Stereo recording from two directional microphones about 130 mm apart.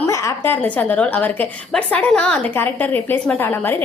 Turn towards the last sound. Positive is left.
turn(degrees=15)  # may be behind; listen again after turning